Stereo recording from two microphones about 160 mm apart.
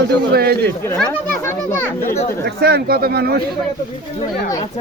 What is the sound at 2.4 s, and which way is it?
Speech, 80° right.